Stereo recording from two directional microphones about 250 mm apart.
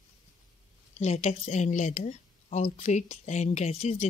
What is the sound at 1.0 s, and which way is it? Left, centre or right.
Speech, left.